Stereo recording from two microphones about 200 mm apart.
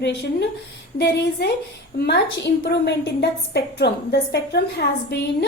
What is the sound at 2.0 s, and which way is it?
A woman's voice, 55° left (ahead or behind).